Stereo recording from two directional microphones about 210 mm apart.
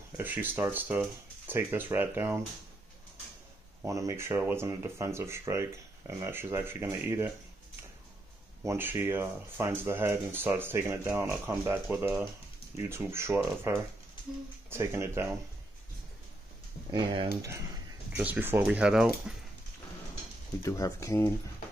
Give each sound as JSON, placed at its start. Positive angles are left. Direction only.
{"t": 0.2, "sound": "speech", "side_deg": -10}
{"t": 3.8, "sound": "speech", "side_deg": -15}
{"t": 8.6, "sound": "speech", "side_deg": -10}
{"t": 14.7, "sound": "speech", "side_deg": -10}
{"t": 16.9, "sound": "speech", "side_deg": -25}
{"t": 17.3, "sound": "speech", "side_deg": -10}
{"t": 20.6, "sound": "speech", "side_deg": 15}